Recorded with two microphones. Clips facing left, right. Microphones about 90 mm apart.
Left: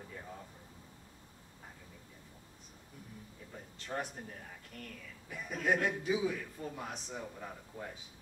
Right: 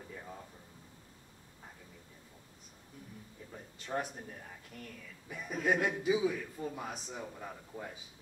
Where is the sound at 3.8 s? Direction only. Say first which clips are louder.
Right 2 dB; 5° right (ahead or behind).